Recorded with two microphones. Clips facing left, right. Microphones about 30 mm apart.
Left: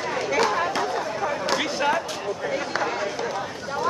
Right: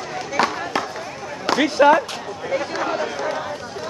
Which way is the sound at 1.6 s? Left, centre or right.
Right.